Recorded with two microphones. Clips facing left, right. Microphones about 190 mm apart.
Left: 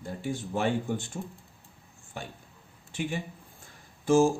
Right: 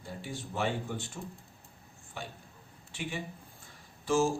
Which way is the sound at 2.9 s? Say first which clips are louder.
Left 5 dB; 50° left (ahead or behind).